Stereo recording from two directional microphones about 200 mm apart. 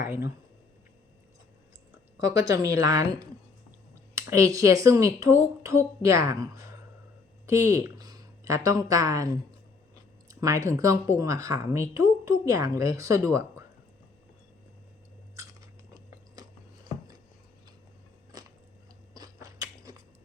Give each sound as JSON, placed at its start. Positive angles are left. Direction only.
{"t": 0.0, "sound": "speech", "side_deg": -15}
{"t": 2.1, "sound": "speech", "side_deg": -15}
{"t": 19.1, "sound": "biting", "side_deg": -20}